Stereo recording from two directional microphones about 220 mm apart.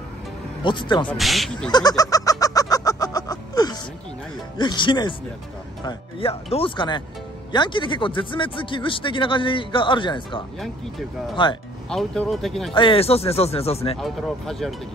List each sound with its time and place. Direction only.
0.7 s speech: 20° left (ahead or behind)
1.0 s speech: centre (ahead or behind)
1.7 s fowl: 20° left (ahead or behind)
4.6 s speech: 20° left (ahead or behind)
11.9 s speech: centre (ahead or behind)
12.7 s speech: 25° left (ahead or behind)
13.9 s speech: centre (ahead or behind)